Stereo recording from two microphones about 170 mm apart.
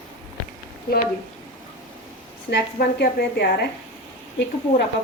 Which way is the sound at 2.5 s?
80° left.